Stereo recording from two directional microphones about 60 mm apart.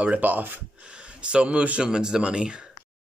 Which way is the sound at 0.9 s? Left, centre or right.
Centre.